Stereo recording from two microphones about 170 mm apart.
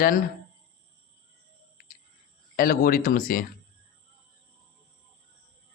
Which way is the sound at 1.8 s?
55° left (ahead or behind).